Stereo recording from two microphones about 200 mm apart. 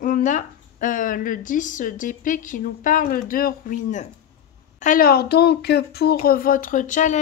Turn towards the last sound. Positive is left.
turn(degrees=40)  # may be behind; listen again after turning